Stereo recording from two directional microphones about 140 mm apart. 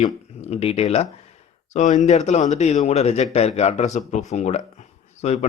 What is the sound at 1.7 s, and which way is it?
Speech, 60° left (ahead or behind).